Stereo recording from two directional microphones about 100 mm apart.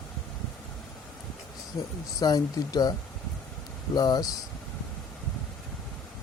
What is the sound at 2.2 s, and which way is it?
Speech, 40° left (ahead or behind).